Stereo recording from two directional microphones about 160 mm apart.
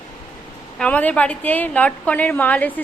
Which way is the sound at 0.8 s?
10° left (ahead or behind).